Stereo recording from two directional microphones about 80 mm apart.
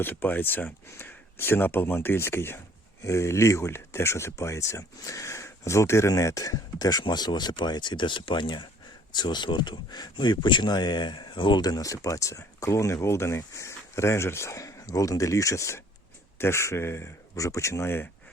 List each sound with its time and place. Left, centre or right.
0.0 s speech: left
11.6 s speech: left